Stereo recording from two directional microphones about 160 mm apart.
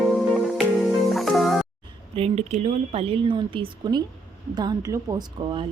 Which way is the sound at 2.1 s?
40° right (ahead or behind).